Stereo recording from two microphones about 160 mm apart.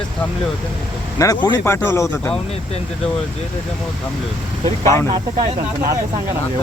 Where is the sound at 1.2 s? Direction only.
25° left (ahead or behind).